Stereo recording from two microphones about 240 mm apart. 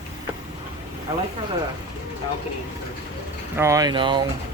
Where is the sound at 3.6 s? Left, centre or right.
Centre.